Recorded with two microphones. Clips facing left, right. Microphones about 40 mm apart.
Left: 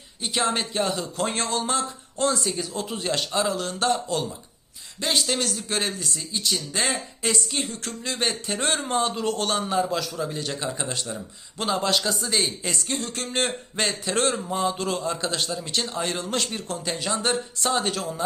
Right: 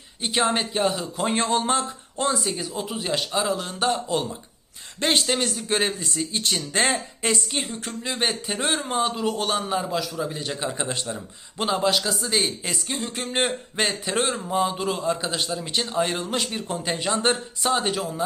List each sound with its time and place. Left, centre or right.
0.2 s speech: right
4.9 s speech: right
5.3 s speech: right
6.3 s speech: right
17.6 s speech: centre